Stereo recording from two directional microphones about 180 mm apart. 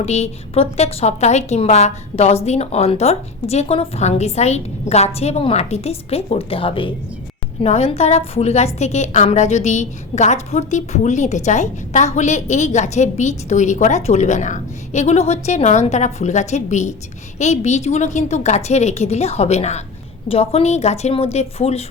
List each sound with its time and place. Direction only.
0.0 s a woman's voice: 35° left (ahead or behind)